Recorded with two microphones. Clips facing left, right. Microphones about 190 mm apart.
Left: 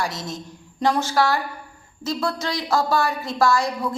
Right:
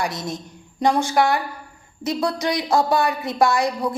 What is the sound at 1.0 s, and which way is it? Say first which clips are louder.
Speech: right 2 dB; 15° right (ahead or behind).